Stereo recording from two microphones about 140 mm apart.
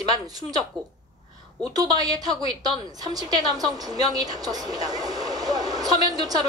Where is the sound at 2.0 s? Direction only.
30° right (ahead or behind).